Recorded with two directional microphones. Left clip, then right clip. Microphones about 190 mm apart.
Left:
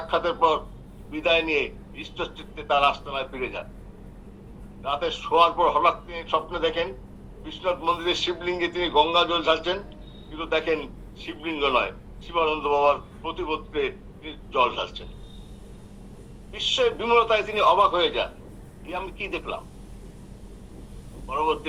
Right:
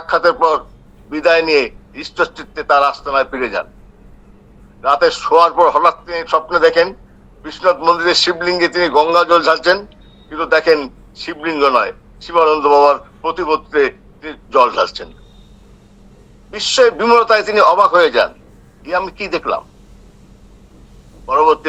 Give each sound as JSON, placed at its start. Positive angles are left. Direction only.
{"t": 0.1, "sound": "a man's voice", "side_deg": -65}
{"t": 4.8, "sound": "a man's voice", "side_deg": -65}
{"t": 16.7, "sound": "a man's voice", "side_deg": -65}
{"t": 21.2, "sound": "a man's voice", "side_deg": -65}